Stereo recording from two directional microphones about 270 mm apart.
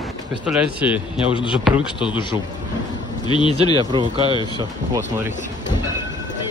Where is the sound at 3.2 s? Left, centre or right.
Centre.